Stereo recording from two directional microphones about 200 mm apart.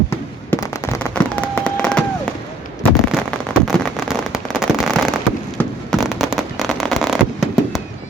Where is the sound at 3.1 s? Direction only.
5° left (ahead or behind).